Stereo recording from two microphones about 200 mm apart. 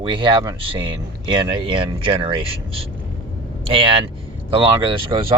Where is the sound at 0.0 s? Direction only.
25° right (ahead or behind).